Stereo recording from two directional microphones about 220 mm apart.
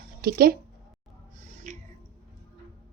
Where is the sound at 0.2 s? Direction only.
45° right (ahead or behind).